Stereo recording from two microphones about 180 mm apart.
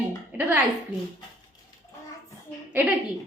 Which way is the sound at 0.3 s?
10° right (ahead or behind).